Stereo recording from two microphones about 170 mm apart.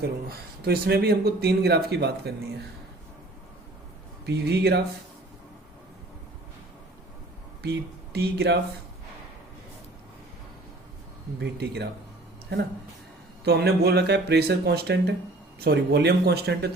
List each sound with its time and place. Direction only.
0.0 s speech: 65° right (ahead or behind)
4.3 s speech: 75° right (ahead or behind)
7.6 s speech: 70° right (ahead or behind)
11.3 s speech: 80° right